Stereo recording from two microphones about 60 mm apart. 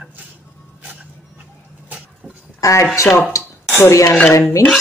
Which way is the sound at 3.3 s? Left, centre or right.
Left.